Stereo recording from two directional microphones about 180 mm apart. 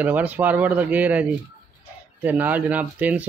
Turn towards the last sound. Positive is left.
turn(degrees=-10)  # may be behind; listen again after turning